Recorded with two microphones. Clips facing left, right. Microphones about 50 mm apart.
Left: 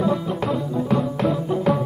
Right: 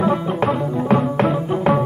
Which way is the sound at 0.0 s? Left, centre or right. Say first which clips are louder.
Right 4 dB; right.